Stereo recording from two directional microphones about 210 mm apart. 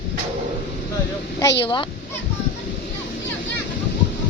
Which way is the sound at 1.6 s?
25° left (ahead or behind).